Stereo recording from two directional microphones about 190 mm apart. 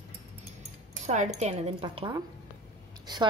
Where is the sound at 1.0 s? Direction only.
35° right (ahead or behind).